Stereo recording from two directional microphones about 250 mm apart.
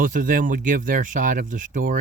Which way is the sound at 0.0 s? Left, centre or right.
Right.